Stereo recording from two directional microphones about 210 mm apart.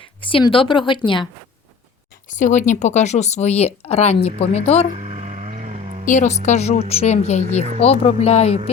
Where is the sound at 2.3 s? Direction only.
35° left (ahead or behind).